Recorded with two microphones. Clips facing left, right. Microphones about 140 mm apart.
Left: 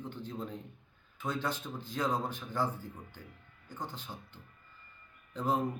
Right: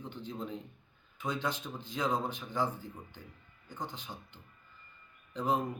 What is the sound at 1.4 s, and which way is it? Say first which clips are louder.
Speech: even; 15° right (ahead or behind).